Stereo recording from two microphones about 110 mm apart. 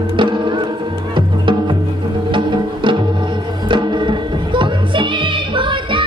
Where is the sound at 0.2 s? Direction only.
45° right (ahead or behind).